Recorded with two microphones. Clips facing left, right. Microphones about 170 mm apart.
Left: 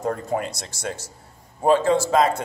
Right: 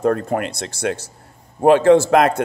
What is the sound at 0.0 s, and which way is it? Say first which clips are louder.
A man's voice: right 6 dB; 65° right (ahead or behind).